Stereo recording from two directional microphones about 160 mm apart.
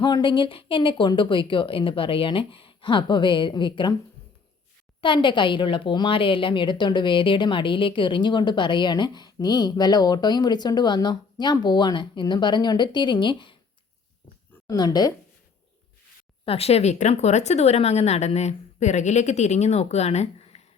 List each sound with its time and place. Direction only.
0.0 s a woman's voice: 30° left (ahead or behind)
4.9 s a woman's voice: 30° left (ahead or behind)
14.7 s a woman's voice: 25° left (ahead or behind)
16.5 s a woman's voice: 40° left (ahead or behind)